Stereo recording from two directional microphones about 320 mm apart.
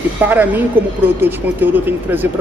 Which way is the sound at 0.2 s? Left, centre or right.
Centre.